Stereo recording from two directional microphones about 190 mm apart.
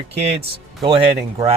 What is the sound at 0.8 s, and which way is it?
Speech, 30° right (ahead or behind).